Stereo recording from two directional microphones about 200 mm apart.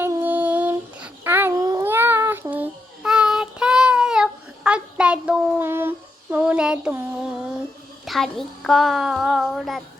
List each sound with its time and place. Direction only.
0.0 s child singing: 10° right (ahead or behind)
8.0 s a woman's voice: centre (ahead or behind)